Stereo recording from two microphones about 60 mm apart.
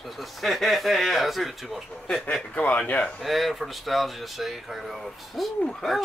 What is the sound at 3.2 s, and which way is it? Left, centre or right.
Speech, centre.